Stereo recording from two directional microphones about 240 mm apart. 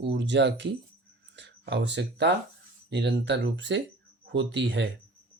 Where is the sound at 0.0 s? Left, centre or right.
Right.